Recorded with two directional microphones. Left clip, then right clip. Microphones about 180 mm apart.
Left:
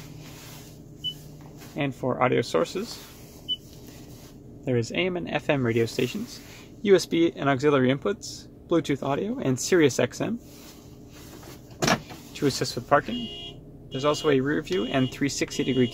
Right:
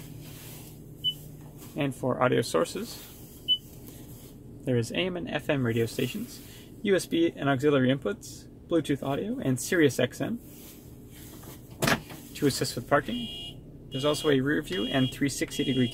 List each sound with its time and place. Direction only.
1.8 s speech: 10° left (ahead or behind)
4.6 s speech: 10° left (ahead or behind)
12.4 s speech: 10° left (ahead or behind)